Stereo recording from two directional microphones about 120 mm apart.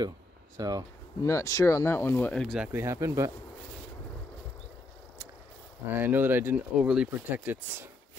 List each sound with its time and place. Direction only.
0.6 s speech: 30° right (ahead or behind)
1.2 s speech: 25° left (ahead or behind)
2.4 s speech: centre (ahead or behind)
2.7 s speech: 25° right (ahead or behind)
5.9 s speech: 15° right (ahead or behind)
7.3 s speech: 20° right (ahead or behind)